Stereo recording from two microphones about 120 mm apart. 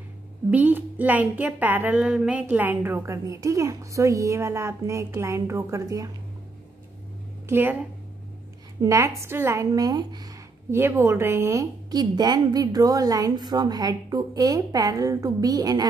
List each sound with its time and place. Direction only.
0.5 s speech: 15° right (ahead or behind)
7.4 s a woman's voice: 15° right (ahead or behind)
8.8 s speech: 25° right (ahead or behind)
10.7 s speech: 20° right (ahead or behind)
11.9 s a woman's voice: 35° right (ahead or behind)